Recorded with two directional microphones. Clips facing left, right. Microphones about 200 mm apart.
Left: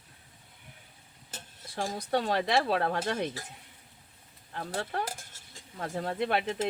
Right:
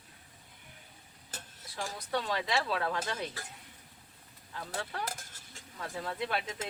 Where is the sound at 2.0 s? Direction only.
50° left (ahead or behind).